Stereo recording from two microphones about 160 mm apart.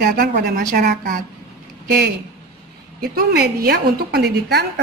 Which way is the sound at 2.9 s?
75° right (ahead or behind).